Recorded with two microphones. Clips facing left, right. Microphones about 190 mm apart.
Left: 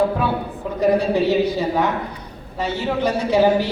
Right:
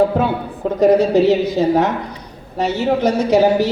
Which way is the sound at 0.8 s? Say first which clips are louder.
Right 5 dB; 45° right (ahead or behind).